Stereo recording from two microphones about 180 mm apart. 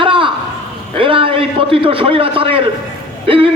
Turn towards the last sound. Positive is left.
turn(degrees=-30)  # may be behind; listen again after turning